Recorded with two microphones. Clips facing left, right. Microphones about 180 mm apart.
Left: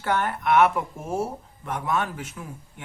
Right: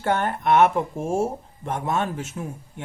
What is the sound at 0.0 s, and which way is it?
Speech, 25° right (ahead or behind).